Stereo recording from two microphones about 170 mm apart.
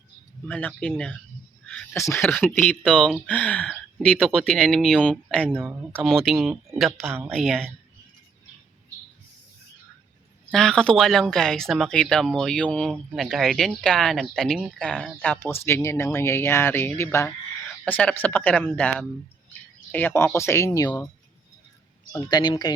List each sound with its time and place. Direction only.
0.4 s speech: 10° left (ahead or behind)
1.6 s a sound: 5° left (ahead or behind)
2.0 s speech: 15° left (ahead or behind)
5.5 s speech: 15° right (ahead or behind)
6.0 s speech: centre (ahead or behind)
7.0 s speech: 15° right (ahead or behind)
7.3 s speech: centre (ahead or behind)
10.5 s speech: 5° left (ahead or behind)
22.1 s a man's voice: 25° left (ahead or behind)